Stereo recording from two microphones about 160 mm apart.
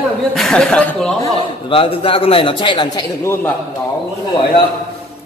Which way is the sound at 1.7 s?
35° left (ahead or behind).